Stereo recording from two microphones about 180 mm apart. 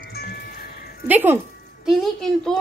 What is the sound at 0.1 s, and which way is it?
Music, 60° left (ahead or behind).